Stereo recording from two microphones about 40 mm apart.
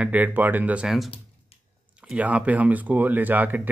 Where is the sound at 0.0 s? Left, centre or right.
Right.